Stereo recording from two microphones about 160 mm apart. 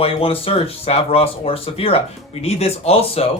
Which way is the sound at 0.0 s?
35° left (ahead or behind).